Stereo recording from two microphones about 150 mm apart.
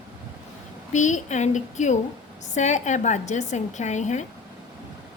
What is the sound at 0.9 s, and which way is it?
A woman's voice, 55° left (ahead or behind).